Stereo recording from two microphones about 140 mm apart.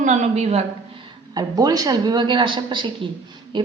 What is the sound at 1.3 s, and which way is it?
A woman's voice, 30° right (ahead or behind).